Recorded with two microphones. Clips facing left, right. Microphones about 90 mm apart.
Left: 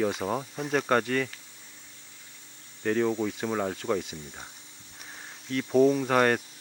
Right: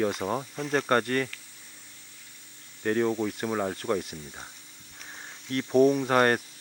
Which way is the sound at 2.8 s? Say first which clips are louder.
Even; 5° right (ahead or behind).